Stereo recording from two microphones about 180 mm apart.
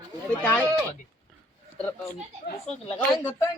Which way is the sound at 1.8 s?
10° left (ahead or behind).